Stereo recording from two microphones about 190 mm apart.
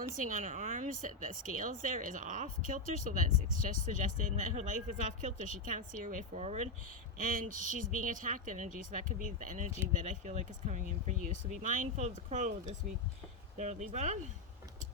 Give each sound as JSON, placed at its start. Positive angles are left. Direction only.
{"t": 0.2, "sound": "speech", "side_deg": -45}